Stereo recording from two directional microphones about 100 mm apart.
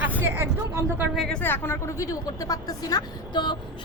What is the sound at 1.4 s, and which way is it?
Speech, 25° left (ahead or behind).